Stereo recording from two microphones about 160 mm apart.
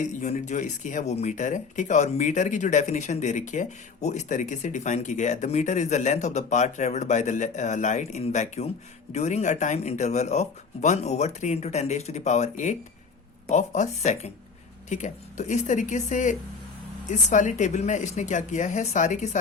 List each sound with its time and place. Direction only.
0.0 s speech: 50° left (ahead or behind)